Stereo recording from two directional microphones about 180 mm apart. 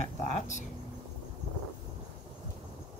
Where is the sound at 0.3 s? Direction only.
40° left (ahead or behind).